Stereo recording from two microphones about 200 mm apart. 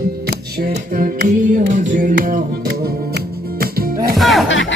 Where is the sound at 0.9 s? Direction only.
45° right (ahead or behind).